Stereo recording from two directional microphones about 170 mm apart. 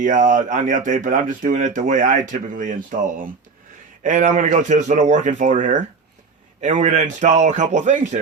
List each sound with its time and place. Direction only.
0.0 s speech: 45° right (ahead or behind)